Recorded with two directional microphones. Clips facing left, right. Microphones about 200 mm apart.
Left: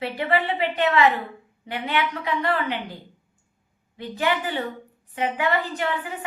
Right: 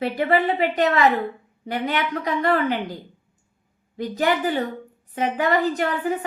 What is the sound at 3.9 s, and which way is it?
A woman's voice, 40° right (ahead or behind).